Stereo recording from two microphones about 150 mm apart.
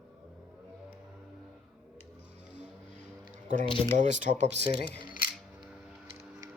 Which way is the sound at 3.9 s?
55° right (ahead or behind).